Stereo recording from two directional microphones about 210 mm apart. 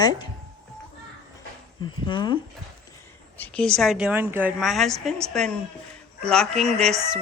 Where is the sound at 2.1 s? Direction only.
20° left (ahead or behind).